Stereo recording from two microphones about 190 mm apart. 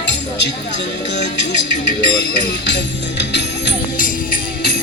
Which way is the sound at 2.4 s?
65° left (ahead or behind).